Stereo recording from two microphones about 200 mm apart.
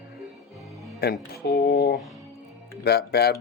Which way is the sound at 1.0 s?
50° left (ahead or behind).